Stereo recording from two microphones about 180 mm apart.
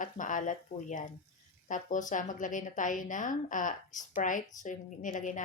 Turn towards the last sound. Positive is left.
turn(degrees=45)  # may be behind; listen again after turning